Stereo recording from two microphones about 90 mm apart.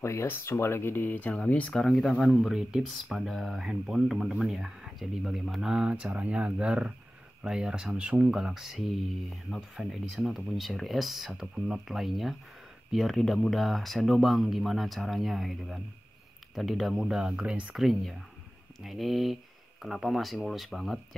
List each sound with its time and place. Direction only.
0.0 s speech: 30° left (ahead or behind); by 17.7 s 10° right (ahead or behind)
17.7 s speech: centre (ahead or behind)